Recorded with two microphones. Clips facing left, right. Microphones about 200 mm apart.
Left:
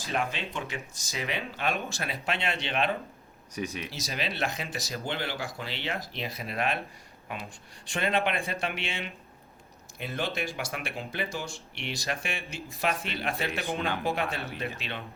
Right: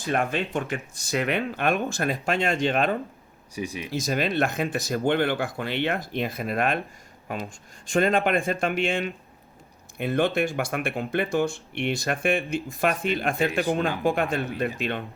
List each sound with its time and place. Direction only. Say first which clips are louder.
0.0 s speech: right 6 dB; 55° right (ahead or behind)
3.5 s speech: right 2 dB; 10° right (ahead or behind)
3.8 s speech: right 9 dB; 50° right (ahead or behind)
7.9 s speech: right 7 dB; 50° right (ahead or behind)